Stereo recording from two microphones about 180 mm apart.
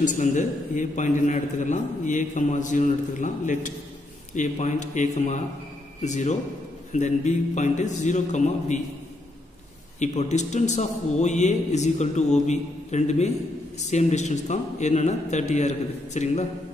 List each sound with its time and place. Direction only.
0.0 s a man's voice: 45° left (ahead or behind)
9.9 s a man's voice: 40° left (ahead or behind)